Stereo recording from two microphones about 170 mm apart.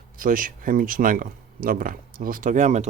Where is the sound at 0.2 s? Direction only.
55° right (ahead or behind).